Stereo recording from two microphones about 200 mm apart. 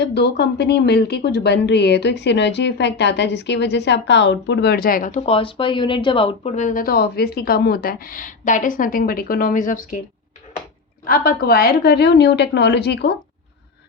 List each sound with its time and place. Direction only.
0.0 s speech: 55° left (ahead or behind)
11.0 s a woman's voice: 45° left (ahead or behind)